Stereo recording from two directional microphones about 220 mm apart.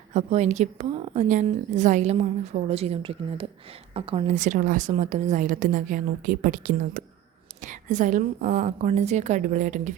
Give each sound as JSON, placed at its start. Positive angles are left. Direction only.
{"t": 0.1, "sound": "a woman's voice", "side_deg": -30}